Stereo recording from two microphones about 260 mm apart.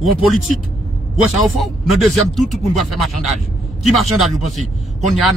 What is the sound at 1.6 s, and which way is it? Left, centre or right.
Speech, centre.